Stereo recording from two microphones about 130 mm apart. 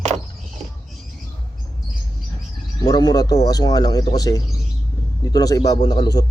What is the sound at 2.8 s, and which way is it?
Speech, 30° left (ahead or behind).